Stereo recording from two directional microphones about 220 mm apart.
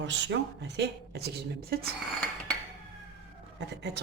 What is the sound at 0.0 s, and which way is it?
Speech, 55° right (ahead or behind).